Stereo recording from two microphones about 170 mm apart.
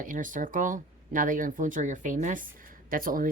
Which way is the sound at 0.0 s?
50° right (ahead or behind).